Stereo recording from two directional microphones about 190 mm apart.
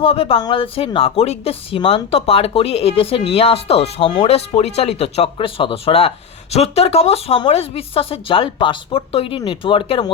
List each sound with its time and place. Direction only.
0.0 s a woman's voice: 30° left (ahead or behind)